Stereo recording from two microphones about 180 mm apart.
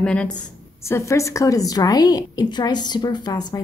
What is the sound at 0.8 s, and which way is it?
A woman's voice, 15° left (ahead or behind).